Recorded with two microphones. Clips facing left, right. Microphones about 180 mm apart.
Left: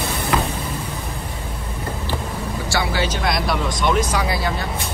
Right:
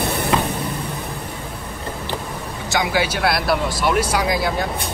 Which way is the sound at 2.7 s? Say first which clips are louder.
Right 3 dB; 15° right (ahead or behind).